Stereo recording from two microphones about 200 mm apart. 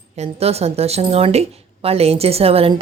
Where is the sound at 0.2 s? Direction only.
30° right (ahead or behind).